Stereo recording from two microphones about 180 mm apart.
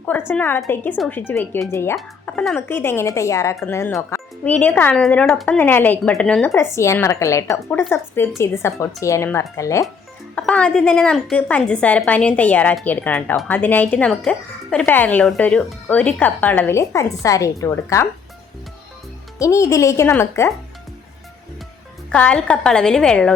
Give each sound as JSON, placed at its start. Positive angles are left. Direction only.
{"t": 0.3, "sound": "speech", "side_deg": 10}
{"t": 2.0, "sound": "speech", "side_deg": 5}
{"t": 10.3, "sound": "speech", "side_deg": 5}
{"t": 19.4, "sound": "speech", "side_deg": 15}
{"t": 22.1, "sound": "a woman's voice", "side_deg": 5}